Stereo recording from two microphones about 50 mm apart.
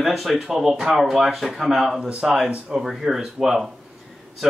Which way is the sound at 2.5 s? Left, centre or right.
Right.